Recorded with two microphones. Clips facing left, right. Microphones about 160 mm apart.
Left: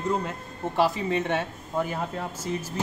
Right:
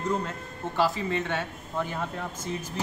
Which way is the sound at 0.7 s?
15° left (ahead or behind).